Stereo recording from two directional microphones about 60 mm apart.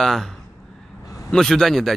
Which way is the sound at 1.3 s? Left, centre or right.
Centre.